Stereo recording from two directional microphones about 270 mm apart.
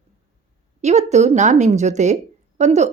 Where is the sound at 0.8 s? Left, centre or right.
Right.